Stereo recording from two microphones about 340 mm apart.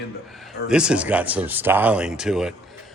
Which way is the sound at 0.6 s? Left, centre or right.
Centre.